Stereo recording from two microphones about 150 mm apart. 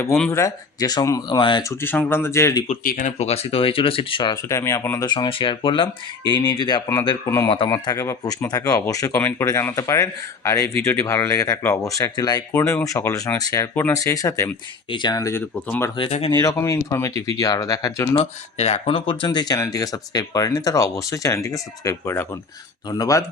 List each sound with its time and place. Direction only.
0.3 s speech: 20° left (ahead or behind)
1.6 s speech: 15° left (ahead or behind)
2.8 s speech: 70° left (ahead or behind)
3.2 s speech: 45° left (ahead or behind); by 18.2 s 25° left (ahead or behind)
18.2 s speech: 45° left (ahead or behind); by 23.2 s 25° left (ahead or behind)